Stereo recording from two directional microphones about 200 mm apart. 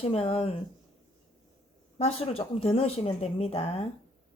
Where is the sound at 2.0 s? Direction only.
30° left (ahead or behind).